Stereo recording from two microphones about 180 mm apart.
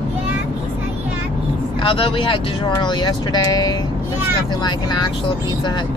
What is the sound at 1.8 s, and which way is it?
Speech, 30° left (ahead or behind).